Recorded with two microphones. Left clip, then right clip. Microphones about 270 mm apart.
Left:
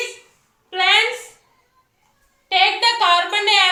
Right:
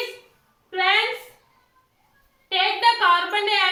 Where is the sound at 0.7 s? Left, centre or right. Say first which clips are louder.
Left 4 dB; centre.